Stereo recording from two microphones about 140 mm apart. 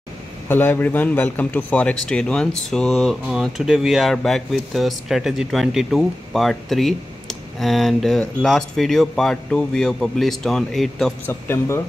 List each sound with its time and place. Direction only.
0.5 s speech: 15° left (ahead or behind)
11.2 s speech: 15° left (ahead or behind)